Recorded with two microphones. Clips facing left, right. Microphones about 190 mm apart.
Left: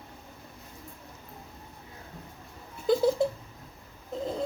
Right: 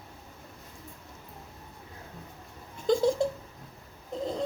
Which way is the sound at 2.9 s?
5° left (ahead or behind).